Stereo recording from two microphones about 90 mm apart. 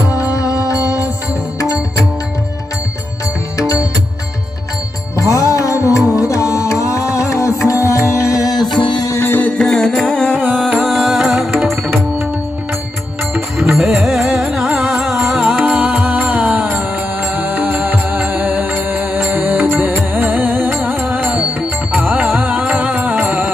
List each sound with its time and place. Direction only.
0.3 s music: 35° left (ahead or behind)
5.3 s music: 35° left (ahead or behind)
8.8 s music: 65° left (ahead or behind)
9.0 s music: 30° left (ahead or behind)
9.6 s music: 10° left (ahead or behind)
10.3 s music: 20° right (ahead or behind)
10.8 s music: centre (ahead or behind)
13.3 s music: 5° right (ahead or behind)